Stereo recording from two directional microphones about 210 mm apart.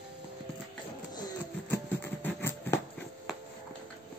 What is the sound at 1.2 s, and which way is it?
Music, 10° left (ahead or behind).